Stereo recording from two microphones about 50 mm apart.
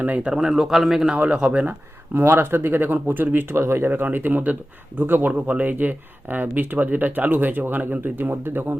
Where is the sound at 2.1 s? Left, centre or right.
Right.